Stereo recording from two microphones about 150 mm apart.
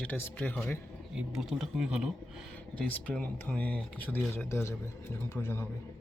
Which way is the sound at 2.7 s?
10° left (ahead or behind).